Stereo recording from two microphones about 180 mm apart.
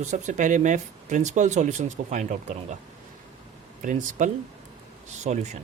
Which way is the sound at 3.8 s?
45° right (ahead or behind).